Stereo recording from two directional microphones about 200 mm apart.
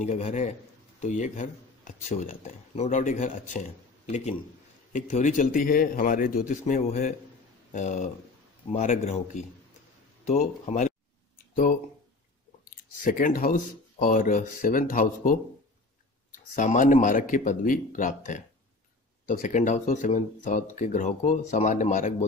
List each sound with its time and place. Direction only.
0.0 s a man's voice: 35° left (ahead or behind)
10.2 s a man's voice: 35° left (ahead or behind)
12.6 s a man's voice: 45° left (ahead or behind)